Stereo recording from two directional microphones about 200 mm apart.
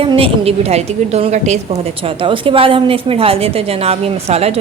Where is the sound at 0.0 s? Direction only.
25° right (ahead or behind).